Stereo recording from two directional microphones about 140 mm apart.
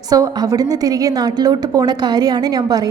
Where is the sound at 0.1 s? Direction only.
25° right (ahead or behind).